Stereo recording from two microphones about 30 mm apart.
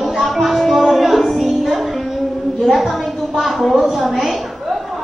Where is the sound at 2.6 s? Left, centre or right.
Centre.